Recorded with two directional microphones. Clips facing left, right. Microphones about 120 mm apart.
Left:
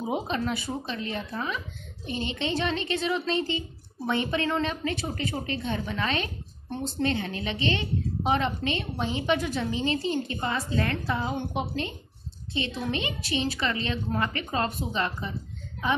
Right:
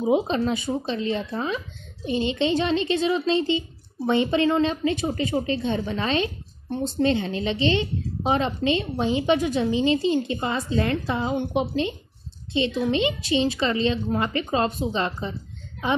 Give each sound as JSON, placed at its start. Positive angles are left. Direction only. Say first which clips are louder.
{"t": 0.1, "sound": "a woman's voice", "louder": "right 7 dB", "side_deg": -20}